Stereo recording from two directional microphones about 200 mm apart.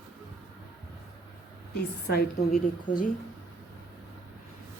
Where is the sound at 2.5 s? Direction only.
40° left (ahead or behind).